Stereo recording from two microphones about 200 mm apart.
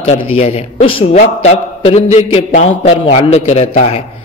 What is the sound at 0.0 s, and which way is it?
A man's voice, 30° left (ahead or behind).